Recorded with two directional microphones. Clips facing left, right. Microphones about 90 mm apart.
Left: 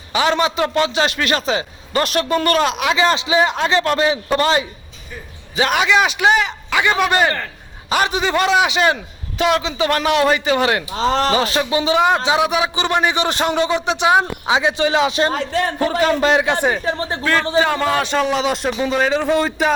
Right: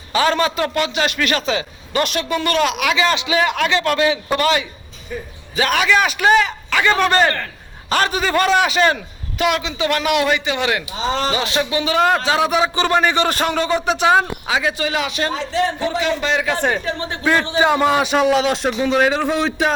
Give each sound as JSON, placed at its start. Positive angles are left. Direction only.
{"t": 0.1, "sound": "a man's voice", "side_deg": 20}
{"t": 9.4, "sound": "a man's voice", "side_deg": 30}
{"t": 10.9, "sound": "speech", "side_deg": 75}
{"t": 11.3, "sound": "a man's voice", "side_deg": 40}
{"t": 11.9, "sound": "a man's voice", "side_deg": 15}
{"t": 15.3, "sound": "a man's voice", "side_deg": 50}
{"t": 16.4, "sound": "a man's voice", "side_deg": 25}
{"t": 17.2, "sound": "a man's voice", "side_deg": -15}